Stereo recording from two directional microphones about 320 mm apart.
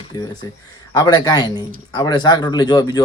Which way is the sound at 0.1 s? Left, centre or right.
Centre.